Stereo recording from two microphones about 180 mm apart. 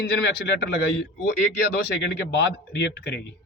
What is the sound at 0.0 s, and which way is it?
Speech, 65° left (ahead or behind).